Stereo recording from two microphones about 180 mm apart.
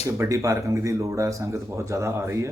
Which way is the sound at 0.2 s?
15° right (ahead or behind).